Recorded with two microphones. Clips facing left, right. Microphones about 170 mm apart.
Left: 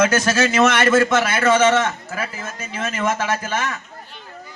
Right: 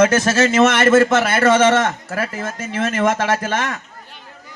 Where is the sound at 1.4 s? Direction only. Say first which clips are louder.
Right 2 dB; 40° right (ahead or behind).